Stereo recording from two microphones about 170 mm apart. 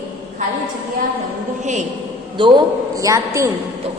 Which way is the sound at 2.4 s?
25° right (ahead or behind).